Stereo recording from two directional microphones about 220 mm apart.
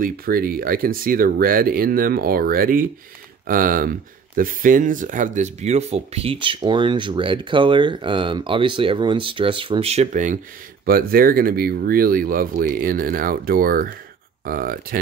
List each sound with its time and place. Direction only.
0.0 s speech: 40° right (ahead or behind)